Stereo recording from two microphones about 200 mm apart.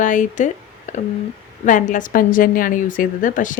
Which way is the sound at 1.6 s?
40° left (ahead or behind).